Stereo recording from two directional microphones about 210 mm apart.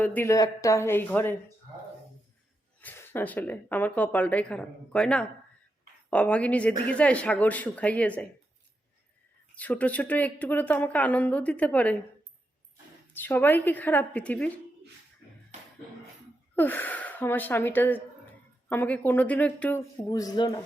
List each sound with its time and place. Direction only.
0.0 s speech: 10° left (ahead or behind)
2.8 s speech: 10° left (ahead or behind)
9.6 s speech: 5° left (ahead or behind)
13.1 s speech: 10° left (ahead or behind)
16.6 s speech: 10° left (ahead or behind)
20.1 s speech: 20° left (ahead or behind)